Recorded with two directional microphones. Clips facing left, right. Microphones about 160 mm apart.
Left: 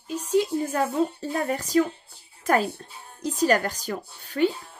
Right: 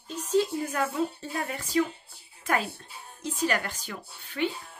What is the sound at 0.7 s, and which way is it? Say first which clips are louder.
Speech: left 5 dB; 35° left (ahead or behind).